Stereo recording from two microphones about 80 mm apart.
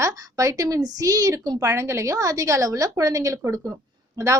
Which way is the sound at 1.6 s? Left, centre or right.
Right.